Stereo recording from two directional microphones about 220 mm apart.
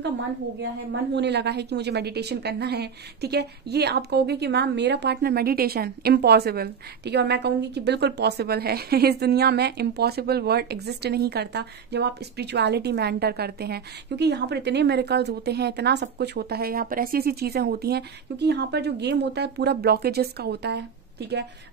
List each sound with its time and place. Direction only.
1.1 s a woman's voice: 50° right (ahead or behind)